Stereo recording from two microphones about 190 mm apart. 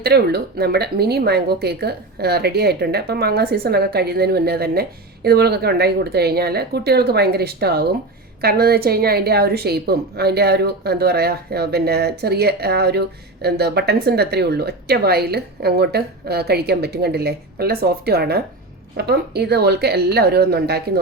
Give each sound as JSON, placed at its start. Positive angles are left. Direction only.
{"t": 0.0, "sound": "a woman's voice", "side_deg": -60}